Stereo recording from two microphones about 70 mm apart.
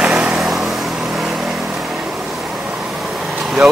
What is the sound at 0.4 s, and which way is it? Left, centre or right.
Vehicle, centre.